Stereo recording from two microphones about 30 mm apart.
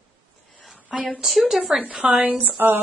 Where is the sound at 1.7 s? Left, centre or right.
Centre.